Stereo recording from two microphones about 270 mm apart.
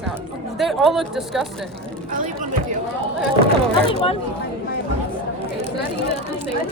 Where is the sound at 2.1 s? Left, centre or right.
Right.